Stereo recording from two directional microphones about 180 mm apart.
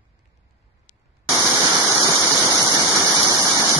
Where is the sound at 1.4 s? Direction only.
10° right (ahead or behind).